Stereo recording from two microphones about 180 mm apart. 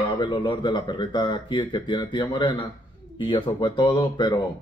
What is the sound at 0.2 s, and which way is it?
Speech, 25° left (ahead or behind).